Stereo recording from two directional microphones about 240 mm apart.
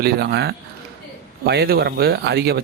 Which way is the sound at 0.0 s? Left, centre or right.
Right.